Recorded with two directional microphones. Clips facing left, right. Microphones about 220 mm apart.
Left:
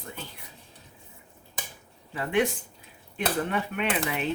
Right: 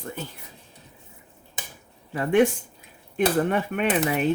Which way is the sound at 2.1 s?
45° right (ahead or behind).